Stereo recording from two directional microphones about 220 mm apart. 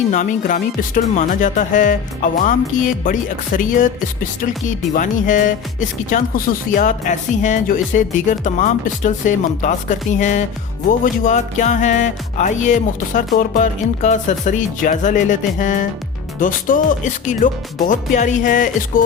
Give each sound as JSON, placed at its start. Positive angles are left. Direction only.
{"t": 0.1, "sound": "speech", "side_deg": 35}